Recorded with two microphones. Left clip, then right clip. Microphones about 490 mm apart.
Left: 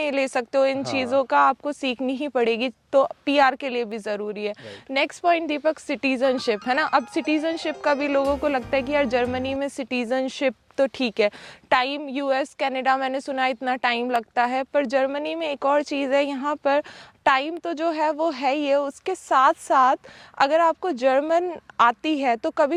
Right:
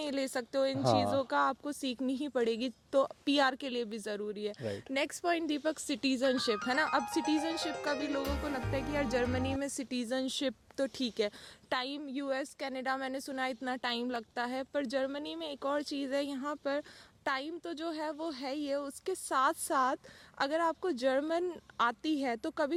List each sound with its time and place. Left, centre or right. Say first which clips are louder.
0.0 s a woman's voice: left 12 dB; centre
7.8 s a woman's voice: left 13 dB; left; by 22.7 s centre